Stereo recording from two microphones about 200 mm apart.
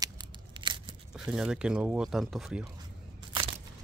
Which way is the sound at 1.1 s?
5° right (ahead or behind).